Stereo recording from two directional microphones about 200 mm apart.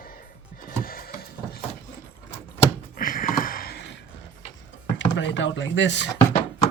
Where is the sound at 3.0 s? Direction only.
45° left (ahead or behind).